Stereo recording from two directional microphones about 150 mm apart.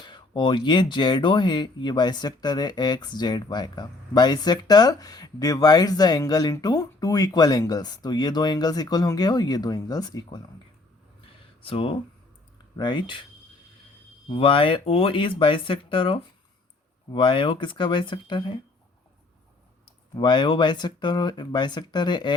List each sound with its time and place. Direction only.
0.0 s speech: 30° left (ahead or behind)
11.6 s speech: 35° left (ahead or behind)
14.3 s speech: 40° left (ahead or behind)
20.1 s speech: 30° left (ahead or behind)